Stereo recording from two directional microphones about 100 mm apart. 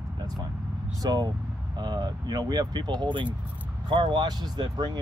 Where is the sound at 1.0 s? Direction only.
40° right (ahead or behind).